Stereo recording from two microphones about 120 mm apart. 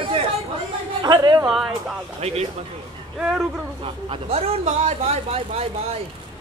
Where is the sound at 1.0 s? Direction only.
35° right (ahead or behind).